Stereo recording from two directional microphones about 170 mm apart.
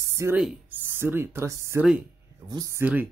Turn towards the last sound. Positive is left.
turn(degrees=-10)  # may be behind; listen again after turning